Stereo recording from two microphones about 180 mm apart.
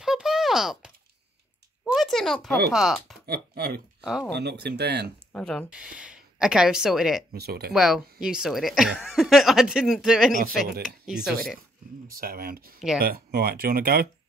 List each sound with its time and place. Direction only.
0.0 s a sound: 5° right (ahead or behind)
2.7 s speech: centre (ahead or behind)
3.3 s speech: 60° right (ahead or behind)
5.3 s speech: 5° left (ahead or behind)
7.3 s speech: 60° right (ahead or behind)
7.7 s speech: 5° right (ahead or behind)
10.3 s speech: 55° right (ahead or behind)
11.1 s speech: centre (ahead or behind)
12.2 s speech: 55° right (ahead or behind)